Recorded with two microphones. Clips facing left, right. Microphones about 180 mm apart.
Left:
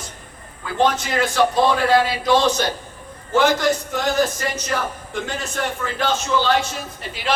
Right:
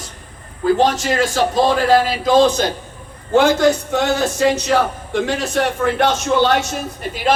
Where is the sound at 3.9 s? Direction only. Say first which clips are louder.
Right 3 dB; 70° right (ahead or behind).